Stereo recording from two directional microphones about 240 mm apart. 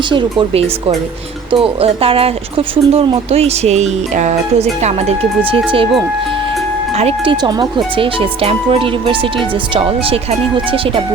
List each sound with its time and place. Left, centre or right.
0.1 s speech: centre
6.9 s speech: right